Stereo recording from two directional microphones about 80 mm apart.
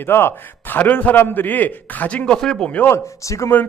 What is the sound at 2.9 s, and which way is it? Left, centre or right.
Speech, left.